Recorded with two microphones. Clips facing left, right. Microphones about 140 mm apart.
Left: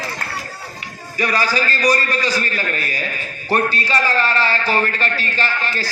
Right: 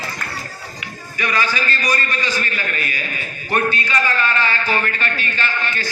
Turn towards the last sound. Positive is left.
turn(degrees=35)  # may be behind; listen again after turning